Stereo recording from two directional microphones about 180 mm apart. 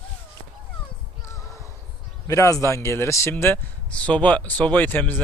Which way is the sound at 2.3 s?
15° left (ahead or behind).